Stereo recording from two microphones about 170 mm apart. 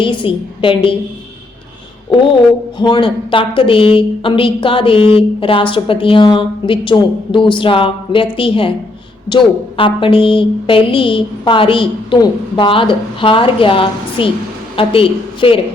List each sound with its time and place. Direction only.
0.0 s a woman's voice: 30° left (ahead or behind)
2.7 s a woman's voice: 25° left (ahead or behind)